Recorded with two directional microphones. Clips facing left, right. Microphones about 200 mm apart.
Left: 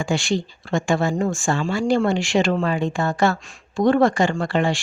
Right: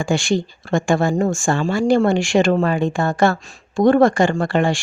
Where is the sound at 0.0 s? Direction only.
50° right (ahead or behind).